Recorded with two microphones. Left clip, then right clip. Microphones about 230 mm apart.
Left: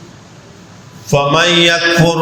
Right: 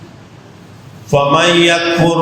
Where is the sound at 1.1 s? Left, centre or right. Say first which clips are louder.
Right 1 dB; left.